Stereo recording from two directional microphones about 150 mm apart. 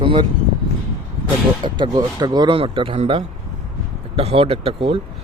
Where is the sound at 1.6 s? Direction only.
30° right (ahead or behind).